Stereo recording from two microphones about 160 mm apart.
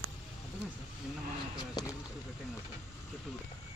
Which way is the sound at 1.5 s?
25° left (ahead or behind).